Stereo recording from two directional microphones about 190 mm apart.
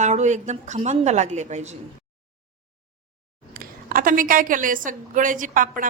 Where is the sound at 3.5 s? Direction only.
50° right (ahead or behind).